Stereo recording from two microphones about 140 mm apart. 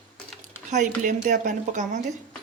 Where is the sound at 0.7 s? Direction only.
65° right (ahead or behind).